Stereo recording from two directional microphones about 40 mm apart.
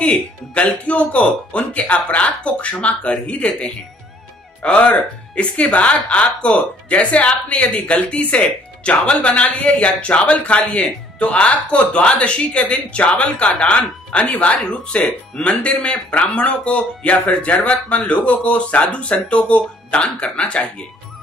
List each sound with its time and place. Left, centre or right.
0.6 s speech: left
4.6 s speech: left
14.3 s speech: left
14.7 s speech: left